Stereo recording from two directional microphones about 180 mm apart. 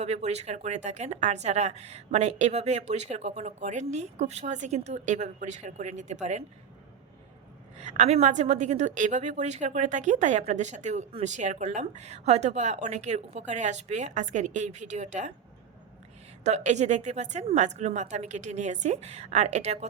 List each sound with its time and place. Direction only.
0.0 s a woman's voice: 35° right (ahead or behind)
7.8 s a woman's voice: 40° right (ahead or behind)
16.4 s a woman's voice: 40° right (ahead or behind)